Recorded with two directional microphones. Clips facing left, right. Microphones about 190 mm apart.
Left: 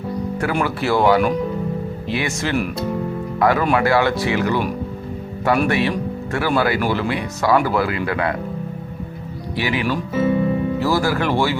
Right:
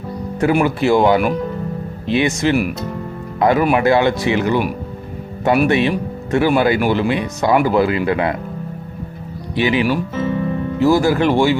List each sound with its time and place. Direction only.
0.6 s speech: 20° right (ahead or behind)
5.6 s speech: 20° right (ahead or behind)
9.6 s speech: 20° right (ahead or behind)
10.2 s speech: 10° left (ahead or behind)
10.8 s speech: 20° right (ahead or behind)